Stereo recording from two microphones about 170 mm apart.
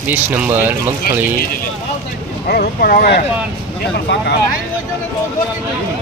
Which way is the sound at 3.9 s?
80° left.